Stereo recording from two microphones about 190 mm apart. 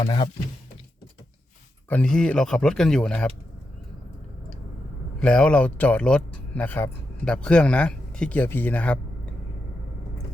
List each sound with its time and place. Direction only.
0.0 s speech: 25° left (ahead or behind)
1.9 s speech: 5° left (ahead or behind)
5.2 s speech: 5° left (ahead or behind)